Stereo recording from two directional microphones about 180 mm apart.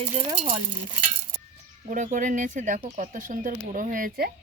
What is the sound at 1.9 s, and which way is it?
Speech, 45° right (ahead or behind).